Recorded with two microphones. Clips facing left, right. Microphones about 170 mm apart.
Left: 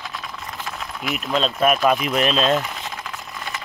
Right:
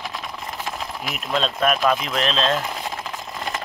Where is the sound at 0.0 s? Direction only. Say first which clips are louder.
Right 2 dB; 25° right (ahead or behind).